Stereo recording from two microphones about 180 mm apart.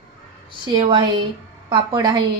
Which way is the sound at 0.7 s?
25° right (ahead or behind).